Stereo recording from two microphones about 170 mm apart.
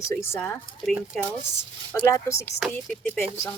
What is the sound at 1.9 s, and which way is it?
Speech, 15° left (ahead or behind).